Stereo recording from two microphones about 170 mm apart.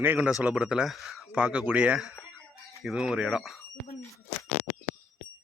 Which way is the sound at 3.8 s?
75° left (ahead or behind).